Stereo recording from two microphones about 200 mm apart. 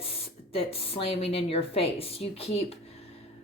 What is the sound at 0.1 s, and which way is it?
A woman's voice, 30° left (ahead or behind).